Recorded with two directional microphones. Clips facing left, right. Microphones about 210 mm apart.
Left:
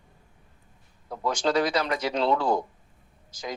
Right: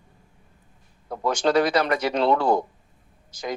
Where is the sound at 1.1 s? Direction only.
60° right (ahead or behind).